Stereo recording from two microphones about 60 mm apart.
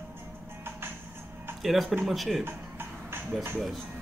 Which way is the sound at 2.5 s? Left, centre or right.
Right.